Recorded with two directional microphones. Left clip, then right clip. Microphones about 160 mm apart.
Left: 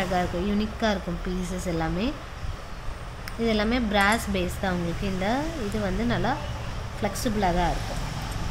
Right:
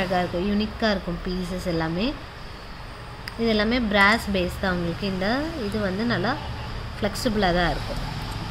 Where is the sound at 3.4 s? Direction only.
10° right (ahead or behind).